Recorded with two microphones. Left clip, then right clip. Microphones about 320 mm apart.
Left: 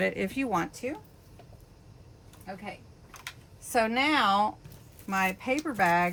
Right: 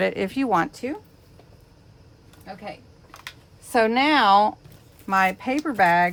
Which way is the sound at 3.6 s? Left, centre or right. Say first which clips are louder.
Right 6 dB; right.